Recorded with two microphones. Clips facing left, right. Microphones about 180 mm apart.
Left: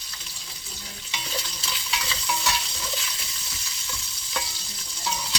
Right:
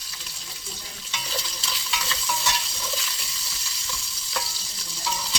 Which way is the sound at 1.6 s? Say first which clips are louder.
Even; centre (ahead or behind).